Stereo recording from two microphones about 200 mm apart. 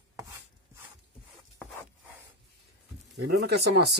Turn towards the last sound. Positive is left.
turn(degrees=-55)  # may be behind; listen again after turning